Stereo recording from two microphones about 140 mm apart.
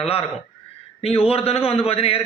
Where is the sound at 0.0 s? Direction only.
45° left (ahead or behind).